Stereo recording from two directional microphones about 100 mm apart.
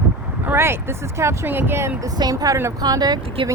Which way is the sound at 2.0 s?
40° right (ahead or behind).